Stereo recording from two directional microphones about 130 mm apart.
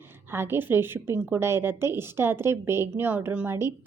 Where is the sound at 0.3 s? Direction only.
15° right (ahead or behind).